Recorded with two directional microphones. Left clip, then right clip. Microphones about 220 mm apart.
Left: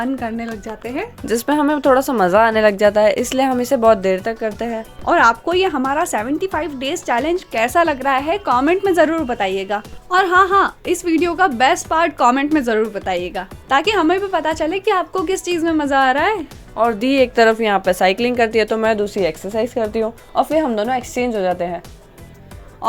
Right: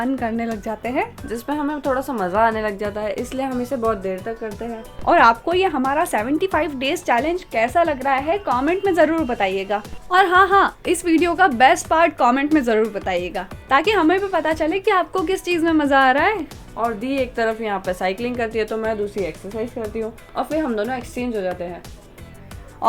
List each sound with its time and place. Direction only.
0.2 s a woman's voice: centre (ahead or behind)
0.6 s speech: 20° right (ahead or behind)
1.3 s speech: 40° left (ahead or behind)
5.0 s a woman's voice: 5° left (ahead or behind)
7.2 s a woman's voice: 15° left (ahead or behind)
16.7 s speech: 45° left (ahead or behind)